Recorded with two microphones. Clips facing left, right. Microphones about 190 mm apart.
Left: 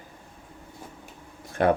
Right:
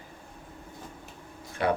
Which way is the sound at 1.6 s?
50° left (ahead or behind).